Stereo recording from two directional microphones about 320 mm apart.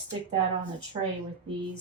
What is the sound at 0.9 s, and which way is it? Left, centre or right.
Speech, centre.